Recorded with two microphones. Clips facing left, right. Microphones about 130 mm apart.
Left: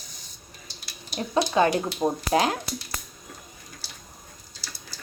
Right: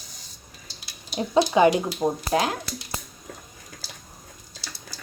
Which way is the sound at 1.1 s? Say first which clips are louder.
Right 3 dB; 20° right (ahead or behind).